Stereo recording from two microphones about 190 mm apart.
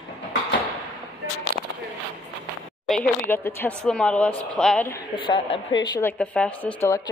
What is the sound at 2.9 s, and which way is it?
Speech, 10° left (ahead or behind).